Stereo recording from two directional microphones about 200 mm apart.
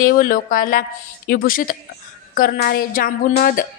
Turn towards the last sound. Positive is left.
turn(degrees=45)  # may be behind; listen again after turning